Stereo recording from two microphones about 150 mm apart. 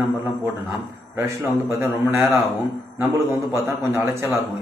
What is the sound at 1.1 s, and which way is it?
A man's voice, 15° right (ahead or behind).